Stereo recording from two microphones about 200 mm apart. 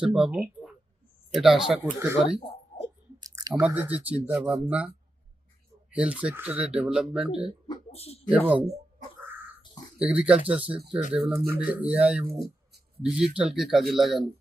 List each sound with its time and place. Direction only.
0.0 s speech: 5° right (ahead or behind)
1.8 s speech: 15° right (ahead or behind)
3.2 s chewing: 20° right (ahead or behind)
3.5 s speech: 5° right (ahead or behind)
5.9 s speech: 5° right (ahead or behind)
7.7 s a sound: 30° left (ahead or behind)
8.3 s speech: 5° right (ahead or behind)
10.0 s speech: 5° right (ahead or behind)